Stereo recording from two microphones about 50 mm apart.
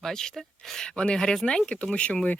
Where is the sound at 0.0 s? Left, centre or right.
Centre.